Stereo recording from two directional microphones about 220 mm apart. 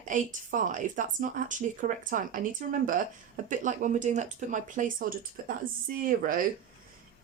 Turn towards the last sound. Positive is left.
turn(degrees=-40)  # may be behind; listen again after turning